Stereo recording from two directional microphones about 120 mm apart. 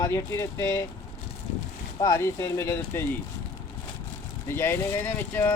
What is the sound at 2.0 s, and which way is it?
Speech, 25° left (ahead or behind).